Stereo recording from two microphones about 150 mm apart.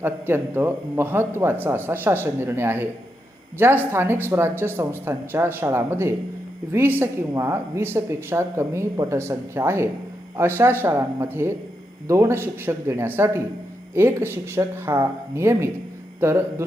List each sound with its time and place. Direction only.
0.0 s speech: 15° right (ahead or behind)